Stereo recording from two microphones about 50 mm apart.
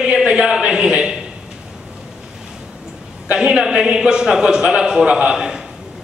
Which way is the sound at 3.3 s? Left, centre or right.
Centre.